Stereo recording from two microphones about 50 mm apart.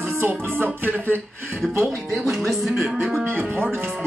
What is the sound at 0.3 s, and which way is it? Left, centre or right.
Music, right.